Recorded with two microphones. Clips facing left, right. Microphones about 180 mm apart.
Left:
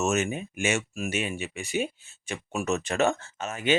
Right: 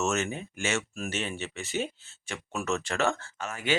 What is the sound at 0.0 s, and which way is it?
Speech, 15° left (ahead or behind).